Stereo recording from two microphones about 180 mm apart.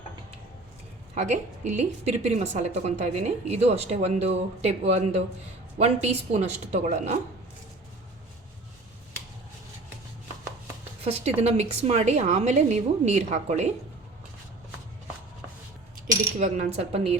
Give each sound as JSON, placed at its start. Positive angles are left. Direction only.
{"t": 1.1, "sound": "a woman's voice", "side_deg": -40}
{"t": 11.0, "sound": "a woman's voice", "side_deg": -35}
{"t": 16.4, "sound": "a woman's voice", "side_deg": -40}